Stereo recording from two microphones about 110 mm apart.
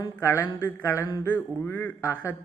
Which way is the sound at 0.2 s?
25° left (ahead or behind).